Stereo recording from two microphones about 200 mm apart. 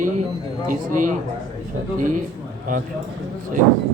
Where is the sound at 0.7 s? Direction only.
40° right (ahead or behind).